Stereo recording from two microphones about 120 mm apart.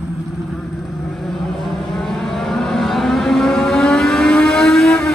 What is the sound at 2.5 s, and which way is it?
Civil defense siren, centre (ahead or behind).